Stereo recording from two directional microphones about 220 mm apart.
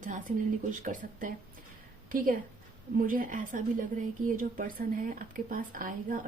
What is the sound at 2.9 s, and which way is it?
A woman's voice, 40° right (ahead or behind).